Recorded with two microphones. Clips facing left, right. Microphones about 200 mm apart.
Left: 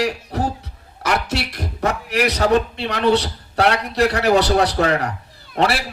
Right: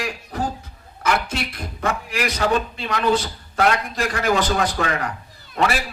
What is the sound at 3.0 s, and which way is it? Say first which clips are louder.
Speech: left 4 dB; 75° left (ahead or behind).